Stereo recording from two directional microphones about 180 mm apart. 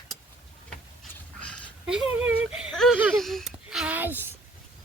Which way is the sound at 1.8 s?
5° right (ahead or behind).